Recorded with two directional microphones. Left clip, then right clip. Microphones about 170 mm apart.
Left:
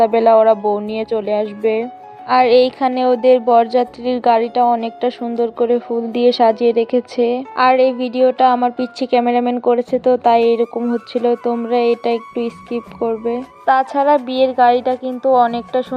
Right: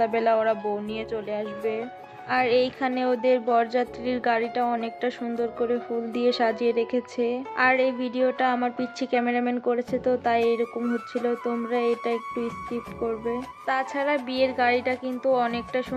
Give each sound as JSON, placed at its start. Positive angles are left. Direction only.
{"t": 0.0, "sound": "a woman's voice", "side_deg": 40}